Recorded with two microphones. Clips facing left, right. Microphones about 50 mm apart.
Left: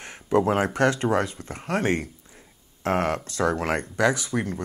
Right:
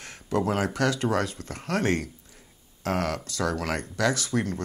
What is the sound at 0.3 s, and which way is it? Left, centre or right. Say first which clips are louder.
Speech: left 4 dB; left.